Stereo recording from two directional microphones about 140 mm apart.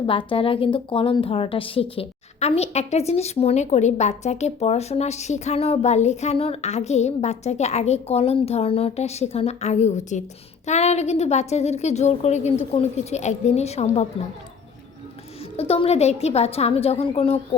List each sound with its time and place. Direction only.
0.0 s a woman's voice: 40° left (ahead or behind)
15.5 s a woman's voice: 45° left (ahead or behind)